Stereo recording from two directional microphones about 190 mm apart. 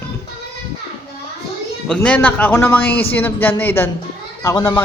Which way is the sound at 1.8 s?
5° left (ahead or behind).